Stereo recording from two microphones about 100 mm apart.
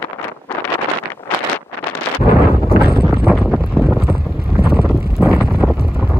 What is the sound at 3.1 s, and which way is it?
Boat, 5° right (ahead or behind).